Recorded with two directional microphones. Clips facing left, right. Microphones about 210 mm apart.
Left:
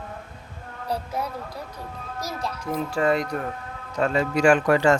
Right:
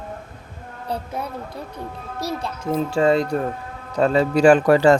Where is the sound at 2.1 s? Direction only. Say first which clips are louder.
Right 4 dB; 30° right (ahead or behind).